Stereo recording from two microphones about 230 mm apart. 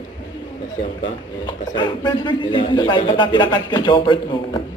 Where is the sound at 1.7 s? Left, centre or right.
Centre.